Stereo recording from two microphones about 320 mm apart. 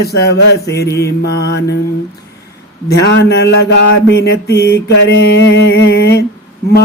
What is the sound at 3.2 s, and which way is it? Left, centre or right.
Mantra, left.